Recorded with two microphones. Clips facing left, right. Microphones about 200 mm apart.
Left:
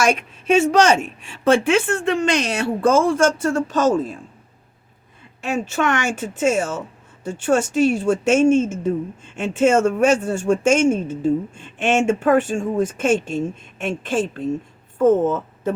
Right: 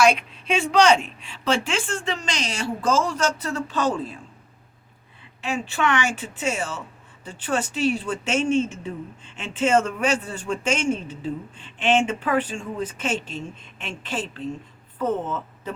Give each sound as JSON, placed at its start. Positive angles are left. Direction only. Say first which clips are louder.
{"t": 0.0, "sound": "speech", "louder": "even", "side_deg": 45}
{"t": 5.4, "sound": "a woman's voice", "louder": "left 4 dB", "side_deg": 45}